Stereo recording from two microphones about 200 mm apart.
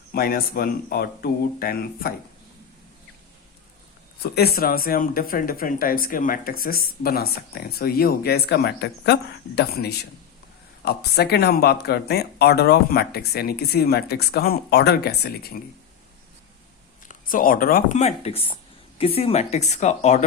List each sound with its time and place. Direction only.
0.1 s speech: 50° left (ahead or behind)
4.2 s speech: 50° left (ahead or behind)
17.1 s speech: 45° left (ahead or behind)